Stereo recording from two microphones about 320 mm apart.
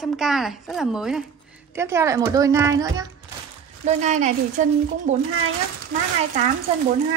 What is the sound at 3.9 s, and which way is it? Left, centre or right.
A woman's voice, right.